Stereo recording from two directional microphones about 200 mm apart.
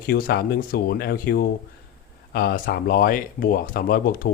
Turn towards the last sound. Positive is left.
turn(degrees=45)  # may be behind; listen again after turning